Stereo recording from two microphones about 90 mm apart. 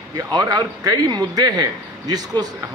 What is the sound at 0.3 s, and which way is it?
A man's voice, 45° right (ahead or behind).